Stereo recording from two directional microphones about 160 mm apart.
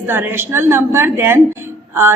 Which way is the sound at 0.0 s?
10° right (ahead or behind).